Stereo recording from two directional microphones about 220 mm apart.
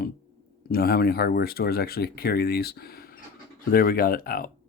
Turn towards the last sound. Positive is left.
turn(degrees=40)  # may be behind; listen again after turning